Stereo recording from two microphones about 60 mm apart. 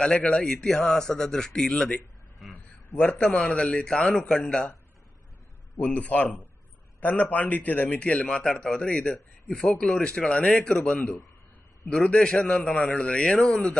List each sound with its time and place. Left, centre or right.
0.0 s a man's voice: centre
2.4 s a sound: centre
3.0 s a man's voice: centre
5.8 s a man's voice: left